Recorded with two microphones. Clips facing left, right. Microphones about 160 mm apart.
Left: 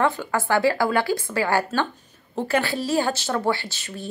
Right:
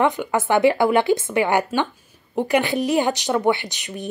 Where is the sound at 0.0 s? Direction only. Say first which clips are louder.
Right 3 dB; 20° right (ahead or behind).